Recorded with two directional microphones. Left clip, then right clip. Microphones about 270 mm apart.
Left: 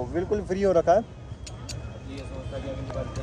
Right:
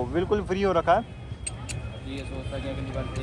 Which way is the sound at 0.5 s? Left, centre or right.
Centre.